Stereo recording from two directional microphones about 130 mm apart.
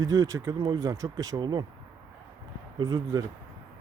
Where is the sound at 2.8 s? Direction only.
30° right (ahead or behind).